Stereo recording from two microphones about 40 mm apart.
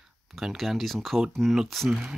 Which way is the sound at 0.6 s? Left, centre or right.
Centre.